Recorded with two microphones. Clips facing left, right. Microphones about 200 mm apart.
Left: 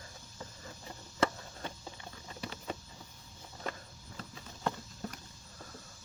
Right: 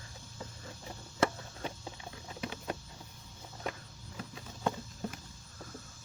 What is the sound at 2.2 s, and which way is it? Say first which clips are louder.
Patter: right 2 dB; 5° right (ahead or behind).